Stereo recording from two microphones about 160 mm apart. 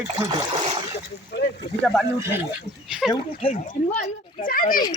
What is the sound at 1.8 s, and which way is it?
Speech, 5° left (ahead or behind).